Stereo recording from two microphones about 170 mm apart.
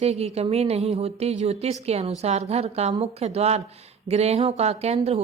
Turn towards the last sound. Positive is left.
turn(degrees=-40)  # may be behind; listen again after turning